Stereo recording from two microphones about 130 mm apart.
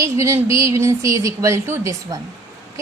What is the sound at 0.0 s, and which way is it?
A woman's voice, 20° right (ahead or behind).